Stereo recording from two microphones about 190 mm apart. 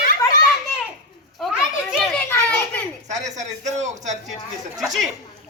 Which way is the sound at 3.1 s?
40° right (ahead or behind).